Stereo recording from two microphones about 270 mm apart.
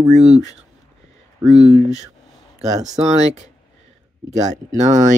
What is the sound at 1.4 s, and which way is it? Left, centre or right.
Speech, centre.